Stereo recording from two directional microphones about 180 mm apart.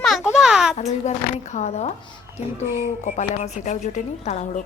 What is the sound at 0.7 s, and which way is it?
Speech, 40° left (ahead or behind).